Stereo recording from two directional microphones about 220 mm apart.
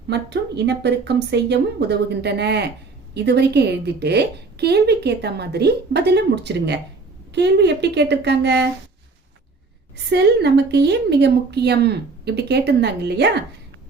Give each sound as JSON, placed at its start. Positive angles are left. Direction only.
{"t": 0.1, "sound": "a woman's voice", "side_deg": -50}
{"t": 10.1, "sound": "a woman's voice", "side_deg": -50}